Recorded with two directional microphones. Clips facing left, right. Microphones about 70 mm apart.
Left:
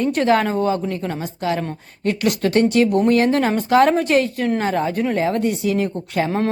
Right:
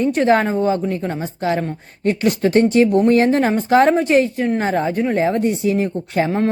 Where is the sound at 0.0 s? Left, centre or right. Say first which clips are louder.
Right 2 dB; right.